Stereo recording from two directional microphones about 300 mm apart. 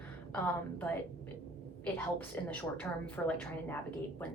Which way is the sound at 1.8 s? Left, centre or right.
Centre.